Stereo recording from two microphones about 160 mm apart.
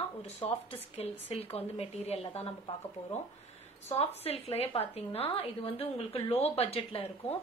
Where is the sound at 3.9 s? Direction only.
40° left (ahead or behind).